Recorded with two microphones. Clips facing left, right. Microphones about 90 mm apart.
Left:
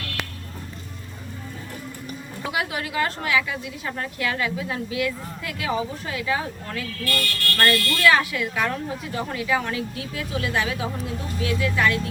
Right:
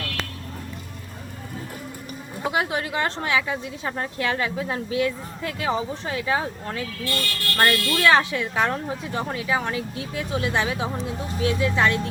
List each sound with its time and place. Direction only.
2.4 s a woman's voice: 30° right (ahead or behind)